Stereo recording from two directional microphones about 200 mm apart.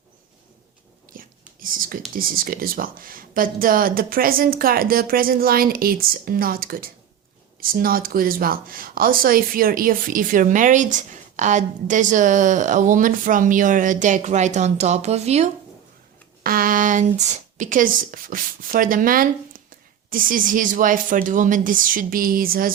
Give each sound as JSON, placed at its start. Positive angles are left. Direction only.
{"t": 1.1, "sound": "whispering", "side_deg": -45}
{"t": 2.1, "sound": "speech", "side_deg": -45}
{"t": 16.4, "sound": "speech", "side_deg": -45}